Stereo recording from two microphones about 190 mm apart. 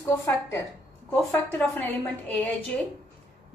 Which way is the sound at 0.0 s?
15° left (ahead or behind).